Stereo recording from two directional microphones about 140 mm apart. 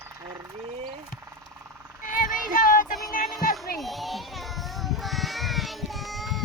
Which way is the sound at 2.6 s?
75° left (ahead or behind).